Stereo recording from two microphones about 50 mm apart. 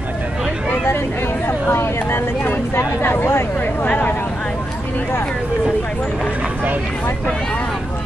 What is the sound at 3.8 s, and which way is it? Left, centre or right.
Speech, left.